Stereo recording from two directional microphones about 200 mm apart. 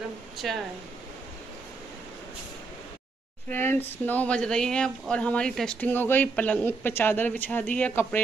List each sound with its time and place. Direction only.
0.4 s speech: centre (ahead or behind)
3.4 s speech: 10° left (ahead or behind)